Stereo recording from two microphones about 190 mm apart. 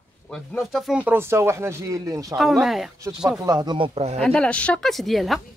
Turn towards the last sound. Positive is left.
turn(degrees=0)  # may be behind; listen again after turning